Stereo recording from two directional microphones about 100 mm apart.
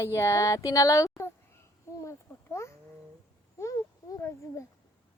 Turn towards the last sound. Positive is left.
turn(degrees=30)  # may be behind; listen again after turning